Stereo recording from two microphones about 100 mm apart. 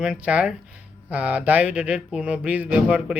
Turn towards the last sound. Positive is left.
turn(degrees=-10)  # may be behind; listen again after turning